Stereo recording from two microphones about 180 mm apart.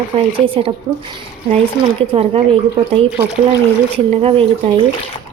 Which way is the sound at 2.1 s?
35° right (ahead or behind).